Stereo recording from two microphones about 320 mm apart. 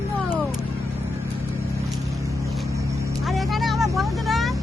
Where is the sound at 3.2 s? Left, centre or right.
Centre.